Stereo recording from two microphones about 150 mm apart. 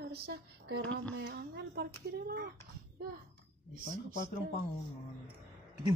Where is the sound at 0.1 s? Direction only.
90° right.